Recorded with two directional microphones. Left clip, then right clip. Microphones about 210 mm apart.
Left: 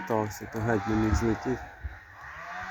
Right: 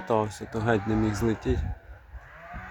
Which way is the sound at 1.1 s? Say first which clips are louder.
Right 1 dB; 20° right (ahead or behind).